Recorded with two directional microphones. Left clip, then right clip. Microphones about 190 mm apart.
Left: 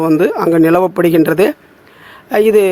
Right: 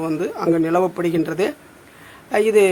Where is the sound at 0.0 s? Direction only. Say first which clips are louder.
Left 10 dB; 40° left (ahead or behind).